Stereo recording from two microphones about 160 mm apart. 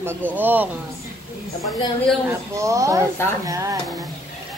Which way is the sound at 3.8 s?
Centre (ahead or behind).